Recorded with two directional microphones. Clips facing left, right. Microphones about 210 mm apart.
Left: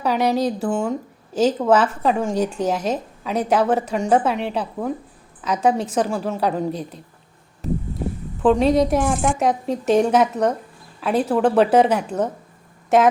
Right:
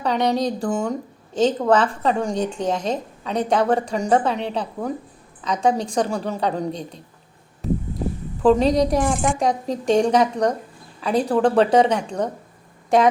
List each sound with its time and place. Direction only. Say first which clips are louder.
0.0 s a woman's voice: left 1 dB; 5° left (ahead or behind)
8.4 s a woman's voice: even; centre (ahead or behind)